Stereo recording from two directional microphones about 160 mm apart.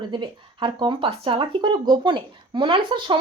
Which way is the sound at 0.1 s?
30° right (ahead or behind).